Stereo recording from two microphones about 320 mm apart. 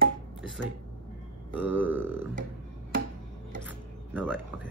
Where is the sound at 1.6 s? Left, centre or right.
Centre.